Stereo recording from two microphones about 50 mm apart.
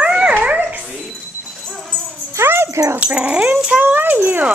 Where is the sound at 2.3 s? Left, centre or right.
Right.